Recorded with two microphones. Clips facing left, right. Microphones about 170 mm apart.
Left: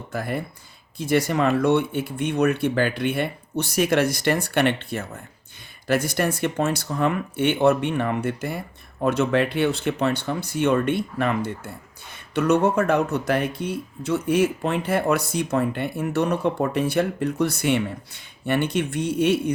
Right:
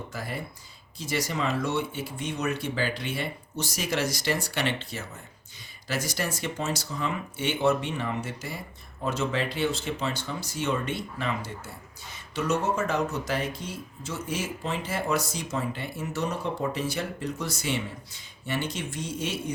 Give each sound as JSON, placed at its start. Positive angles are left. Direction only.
{"t": 0.1, "sound": "speech", "side_deg": 55}